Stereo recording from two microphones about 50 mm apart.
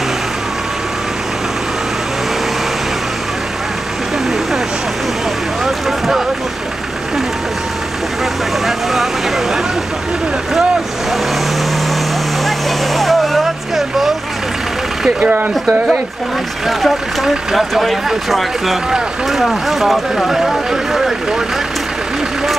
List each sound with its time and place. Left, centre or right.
5.9 s boat: centre
8.6 s vehicle: centre
12.4 s vehicle: centre
15.0 s a sound: right
16.6 s speech: centre